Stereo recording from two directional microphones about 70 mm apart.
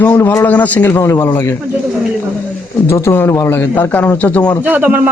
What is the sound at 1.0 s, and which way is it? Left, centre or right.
Speech, left.